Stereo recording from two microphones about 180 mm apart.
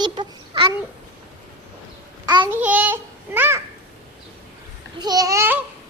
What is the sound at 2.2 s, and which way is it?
Speech, 25° right (ahead or behind).